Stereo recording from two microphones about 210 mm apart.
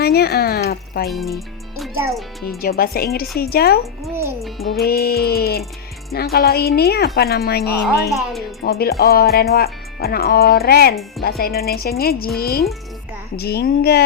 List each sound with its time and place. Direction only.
0.0 s a sound: 50° left (ahead or behind)
1.0 s a child's voice: centre (ahead or behind)
2.6 s a woman's voice: 45° left (ahead or behind)
4.1 s speech: 10° right (ahead or behind)
4.4 s music: centre (ahead or behind)
4.9 s a woman's voice: 45° left (ahead or behind)
8.1 s a child's voice: centre (ahead or behind)
8.6 s a woman's voice: 45° left (ahead or behind)